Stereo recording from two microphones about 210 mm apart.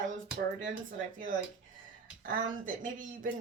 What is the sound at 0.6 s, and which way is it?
A woman's voice, 40° right (ahead or behind).